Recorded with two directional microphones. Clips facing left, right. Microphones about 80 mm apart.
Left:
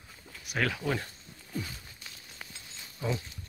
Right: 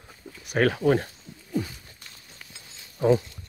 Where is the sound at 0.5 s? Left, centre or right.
Right.